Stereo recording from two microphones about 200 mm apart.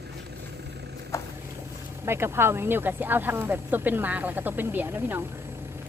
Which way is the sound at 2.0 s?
10° right (ahead or behind).